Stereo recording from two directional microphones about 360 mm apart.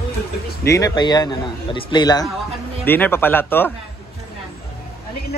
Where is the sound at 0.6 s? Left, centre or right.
Centre.